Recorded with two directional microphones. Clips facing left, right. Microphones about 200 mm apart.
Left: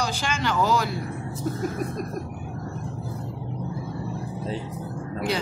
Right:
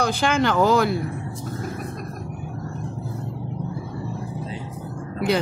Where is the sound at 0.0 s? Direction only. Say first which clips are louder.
Right 6 dB; 55° right (ahead or behind).